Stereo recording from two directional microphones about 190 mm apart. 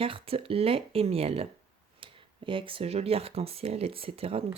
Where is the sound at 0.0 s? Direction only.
30° right (ahead or behind).